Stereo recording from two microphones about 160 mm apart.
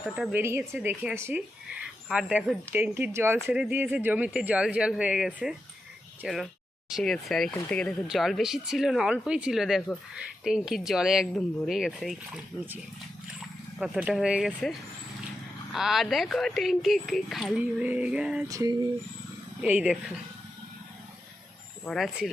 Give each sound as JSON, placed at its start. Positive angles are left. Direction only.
{"t": 0.0, "sound": "speech", "side_deg": -5}
{"t": 0.9, "sound": "speech", "side_deg": -15}
{"t": 13.7, "sound": "speech", "side_deg": -5}
{"t": 18.4, "sound": "a sound", "side_deg": -20}
{"t": 19.6, "sound": "speech", "side_deg": -10}
{"t": 21.8, "sound": "speech", "side_deg": 0}